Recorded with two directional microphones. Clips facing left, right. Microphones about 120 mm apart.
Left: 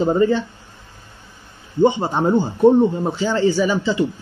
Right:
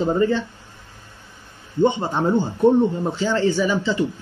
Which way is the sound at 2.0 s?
20° left (ahead or behind).